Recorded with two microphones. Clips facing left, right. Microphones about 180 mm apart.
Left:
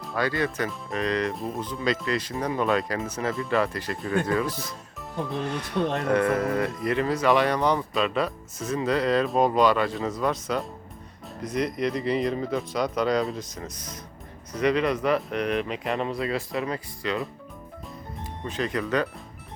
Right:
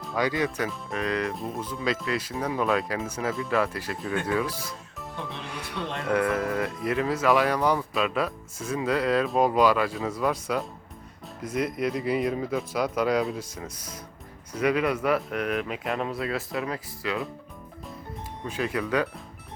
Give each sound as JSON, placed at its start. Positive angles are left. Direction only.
{"t": 0.2, "sound": "speech", "side_deg": -15}
{"t": 0.7, "sound": "speech", "side_deg": 0}
{"t": 5.7, "sound": "speech", "side_deg": 45}
{"t": 6.1, "sound": "speech", "side_deg": 0}
{"t": 18.4, "sound": "speech", "side_deg": -5}